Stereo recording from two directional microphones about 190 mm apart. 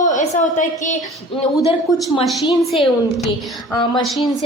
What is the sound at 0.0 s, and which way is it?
Speech, 40° left (ahead or behind).